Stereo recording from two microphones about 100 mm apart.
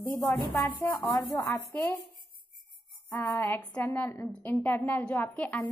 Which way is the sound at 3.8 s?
20° left (ahead or behind).